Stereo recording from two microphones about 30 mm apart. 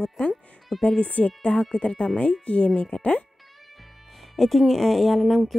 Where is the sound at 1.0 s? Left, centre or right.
Left.